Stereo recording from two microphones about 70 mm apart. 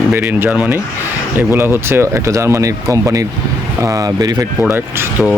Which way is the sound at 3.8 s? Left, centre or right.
Right.